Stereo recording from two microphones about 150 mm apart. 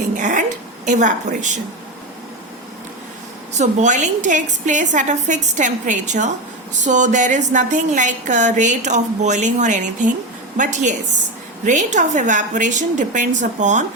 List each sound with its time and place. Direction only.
0.2 s a sound: 55° right (ahead or behind)
0.9 s a woman's voice: 55° right (ahead or behind)
3.5 s a woman's voice: 50° right (ahead or behind)